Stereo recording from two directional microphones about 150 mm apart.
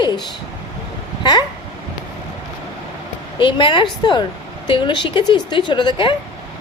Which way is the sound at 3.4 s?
30° left (ahead or behind).